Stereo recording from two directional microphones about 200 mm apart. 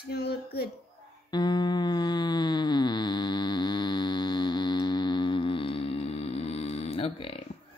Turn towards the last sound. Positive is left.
turn(degrees=30)  # may be behind; listen again after turning